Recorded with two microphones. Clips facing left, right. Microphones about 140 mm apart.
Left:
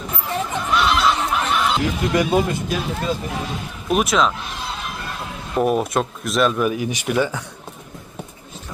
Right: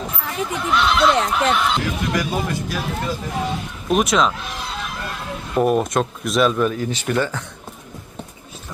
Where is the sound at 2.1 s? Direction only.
20° left (ahead or behind).